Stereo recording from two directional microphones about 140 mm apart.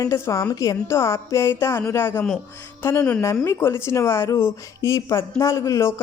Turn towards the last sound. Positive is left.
turn(degrees=20)  # may be behind; listen again after turning